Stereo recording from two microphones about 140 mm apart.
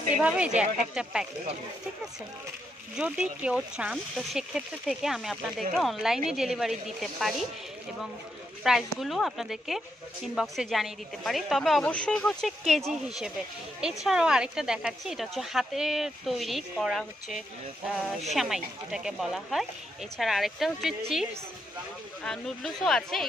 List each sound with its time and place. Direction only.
0.2 s a woman's voice: 10° right (ahead or behind)
3.0 s speech: 10° right (ahead or behind)
8.6 s speech: centre (ahead or behind)